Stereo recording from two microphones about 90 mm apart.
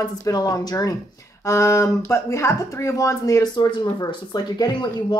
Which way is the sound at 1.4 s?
30° left (ahead or behind).